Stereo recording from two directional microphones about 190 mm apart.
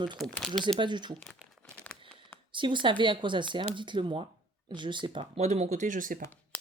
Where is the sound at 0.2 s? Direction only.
5° left (ahead or behind).